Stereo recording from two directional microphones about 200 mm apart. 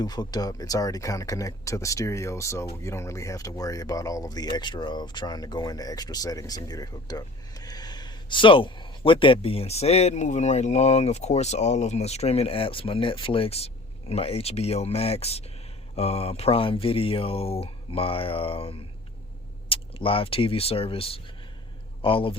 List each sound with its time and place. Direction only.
0.0 s speech: 20° left (ahead or behind)